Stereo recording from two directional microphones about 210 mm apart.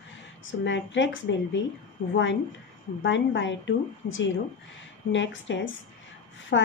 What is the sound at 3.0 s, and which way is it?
A woman's voice, 60° left (ahead or behind).